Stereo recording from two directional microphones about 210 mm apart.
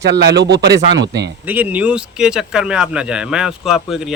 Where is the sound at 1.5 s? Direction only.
5° right (ahead or behind).